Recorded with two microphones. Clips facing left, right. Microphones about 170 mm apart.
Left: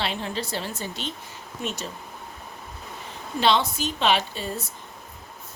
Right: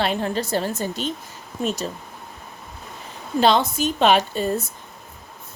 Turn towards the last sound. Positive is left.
turn(degrees=-45)  # may be behind; listen again after turning